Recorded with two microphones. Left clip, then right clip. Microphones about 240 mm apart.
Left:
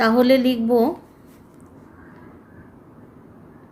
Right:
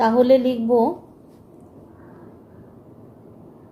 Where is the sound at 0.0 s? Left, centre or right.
Left.